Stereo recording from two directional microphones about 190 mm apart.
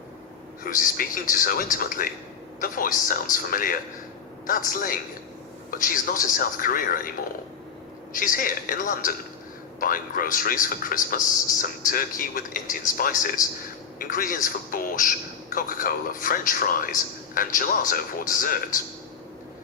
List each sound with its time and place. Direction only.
0.6 s a man's voice: 45° left (ahead or behind)
8.1 s a man's voice: 45° left (ahead or behind)